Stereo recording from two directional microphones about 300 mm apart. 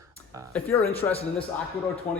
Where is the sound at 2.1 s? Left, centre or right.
Centre.